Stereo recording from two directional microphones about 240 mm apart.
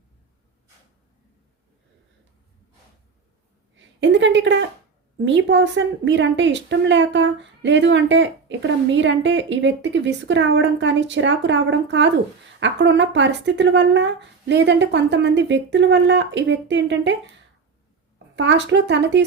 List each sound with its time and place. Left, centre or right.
4.0 s a woman's voice: right
18.3 s a woman's voice: right